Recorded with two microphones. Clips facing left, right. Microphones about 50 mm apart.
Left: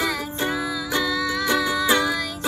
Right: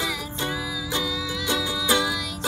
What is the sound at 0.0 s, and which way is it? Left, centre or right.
Music, left.